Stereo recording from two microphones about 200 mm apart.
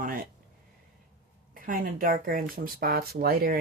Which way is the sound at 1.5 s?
45° right (ahead or behind).